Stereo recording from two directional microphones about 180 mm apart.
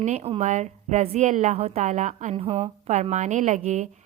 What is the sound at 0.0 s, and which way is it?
A woman's voice, 35° right (ahead or behind).